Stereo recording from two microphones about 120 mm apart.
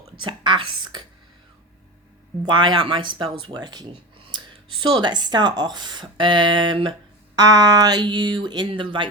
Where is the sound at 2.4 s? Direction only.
40° right (ahead or behind).